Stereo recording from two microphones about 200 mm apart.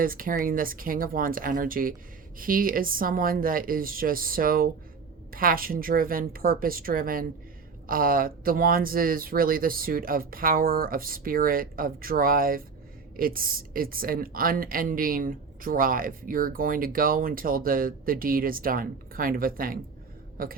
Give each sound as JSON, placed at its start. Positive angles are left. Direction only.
{"t": 0.0, "sound": "a woman's voice", "side_deg": -45}